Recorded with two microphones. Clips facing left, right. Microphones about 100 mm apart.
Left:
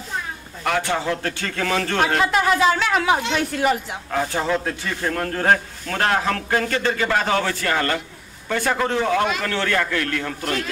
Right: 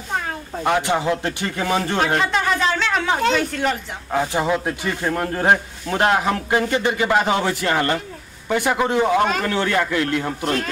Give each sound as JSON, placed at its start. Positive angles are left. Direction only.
{"t": 0.7, "sound": "a man's voice", "side_deg": -20}
{"t": 2.1, "sound": "speech", "side_deg": 5}
{"t": 4.1, "sound": "a man's voice", "side_deg": -15}
{"t": 9.2, "sound": "a man's voice", "side_deg": -40}
{"t": 9.5, "sound": "a man's voice", "side_deg": -15}